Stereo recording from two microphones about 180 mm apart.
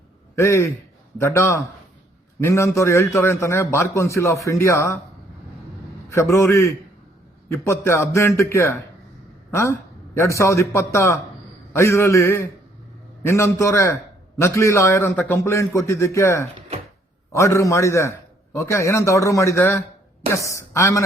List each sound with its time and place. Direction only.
0.3 s a man's voice: 15° left (ahead or behind)
6.1 s a man's voice: 15° left (ahead or behind)